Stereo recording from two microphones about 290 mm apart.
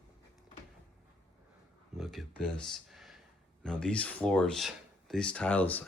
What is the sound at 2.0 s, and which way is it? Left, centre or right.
Speech, centre.